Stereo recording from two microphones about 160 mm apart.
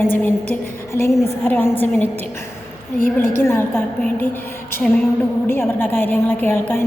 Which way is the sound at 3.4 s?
15° left (ahead or behind).